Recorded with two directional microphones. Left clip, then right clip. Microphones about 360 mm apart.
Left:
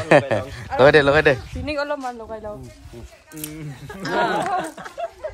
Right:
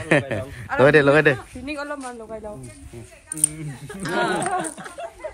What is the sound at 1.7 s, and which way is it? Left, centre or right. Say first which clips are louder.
A man's voice: left 6 dB; left.